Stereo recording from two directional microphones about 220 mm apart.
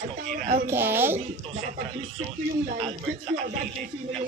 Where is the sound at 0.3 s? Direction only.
35° right (ahead or behind).